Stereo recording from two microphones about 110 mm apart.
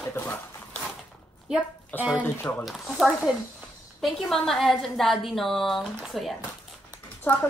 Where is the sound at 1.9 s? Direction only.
15° left (ahead or behind).